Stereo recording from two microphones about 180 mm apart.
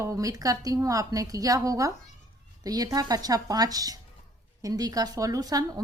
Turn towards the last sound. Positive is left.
turn(degrees=-20)  # may be behind; listen again after turning